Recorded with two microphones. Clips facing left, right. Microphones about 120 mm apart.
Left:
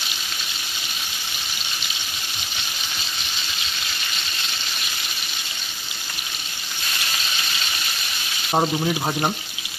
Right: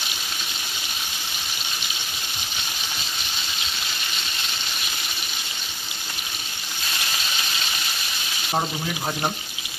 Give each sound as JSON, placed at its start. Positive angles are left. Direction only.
{"t": 8.5, "sound": "speech", "side_deg": 20}